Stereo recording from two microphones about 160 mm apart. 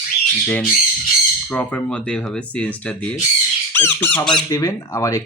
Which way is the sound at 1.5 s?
5° left (ahead or behind).